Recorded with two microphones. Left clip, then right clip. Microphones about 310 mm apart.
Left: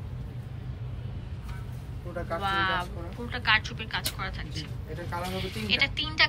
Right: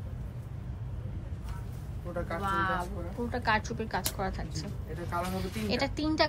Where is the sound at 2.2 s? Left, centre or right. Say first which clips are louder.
Left 4 dB; centre.